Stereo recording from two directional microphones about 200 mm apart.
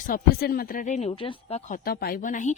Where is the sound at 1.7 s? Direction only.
50° left (ahead or behind).